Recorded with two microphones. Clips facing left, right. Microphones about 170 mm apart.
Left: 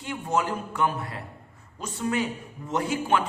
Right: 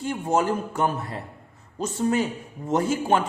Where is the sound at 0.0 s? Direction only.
45° right (ahead or behind).